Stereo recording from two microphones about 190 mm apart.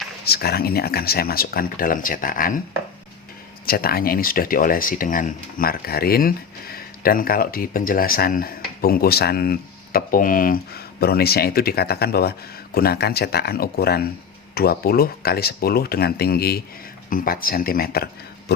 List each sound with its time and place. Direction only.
0.3 s speech: 55° left (ahead or behind)
3.7 s speech: 50° left (ahead or behind)